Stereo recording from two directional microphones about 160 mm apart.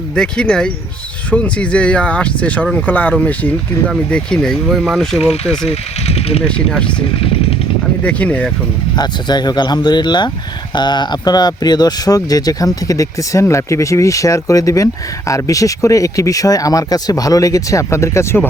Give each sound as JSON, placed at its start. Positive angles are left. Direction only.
{"t": 0.2, "sound": "speech", "side_deg": 5}
{"t": 5.3, "sound": "speech", "side_deg": 40}
{"t": 6.7, "sound": "speech", "side_deg": 5}
{"t": 8.0, "sound": "speech", "side_deg": 10}
{"t": 9.0, "sound": "speech", "side_deg": 25}